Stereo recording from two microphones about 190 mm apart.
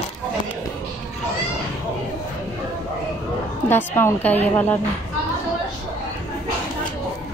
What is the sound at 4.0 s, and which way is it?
Speech, 10° left (ahead or behind).